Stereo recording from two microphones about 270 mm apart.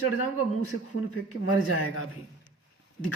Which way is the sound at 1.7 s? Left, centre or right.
Left.